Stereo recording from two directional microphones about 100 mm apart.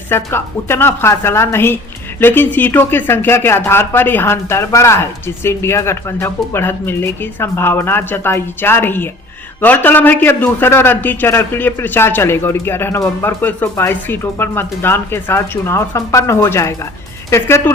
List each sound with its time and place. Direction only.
0.1 s speech: 25° left (ahead or behind)